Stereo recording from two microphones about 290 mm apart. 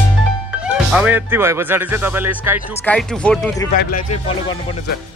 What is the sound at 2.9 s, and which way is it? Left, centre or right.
Speech, centre.